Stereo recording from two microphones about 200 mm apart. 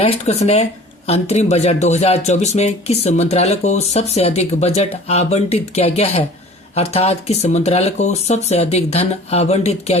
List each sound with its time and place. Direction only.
0.0 s speech: 30° left (ahead or behind)